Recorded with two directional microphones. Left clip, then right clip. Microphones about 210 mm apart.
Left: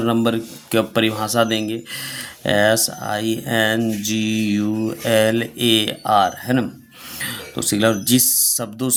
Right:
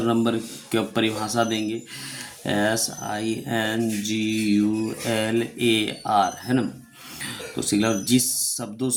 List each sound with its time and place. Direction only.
0.0 s speech: 40° left (ahead or behind)